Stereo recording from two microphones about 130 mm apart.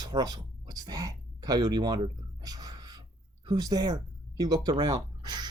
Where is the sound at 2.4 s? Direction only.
30° right (ahead or behind).